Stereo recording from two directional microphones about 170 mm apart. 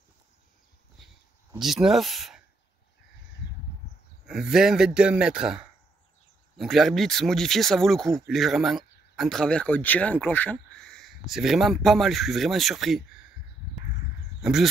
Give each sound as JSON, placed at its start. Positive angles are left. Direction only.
{"t": 1.6, "sound": "speech", "side_deg": 0}
{"t": 4.3, "sound": "speech", "side_deg": -5}
{"t": 14.4, "sound": "speech", "side_deg": -5}